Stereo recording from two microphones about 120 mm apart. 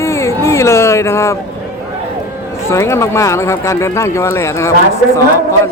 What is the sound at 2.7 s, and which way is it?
Speech, 20° left (ahead or behind).